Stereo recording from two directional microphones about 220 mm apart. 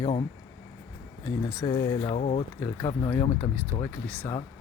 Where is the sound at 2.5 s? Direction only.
10° left (ahead or behind).